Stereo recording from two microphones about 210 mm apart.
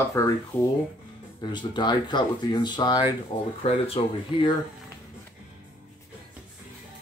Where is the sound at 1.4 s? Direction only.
20° left (ahead or behind).